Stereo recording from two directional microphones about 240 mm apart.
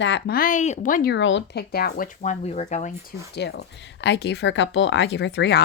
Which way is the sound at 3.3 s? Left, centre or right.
Left.